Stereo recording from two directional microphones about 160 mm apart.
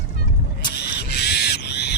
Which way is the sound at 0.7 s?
90° left.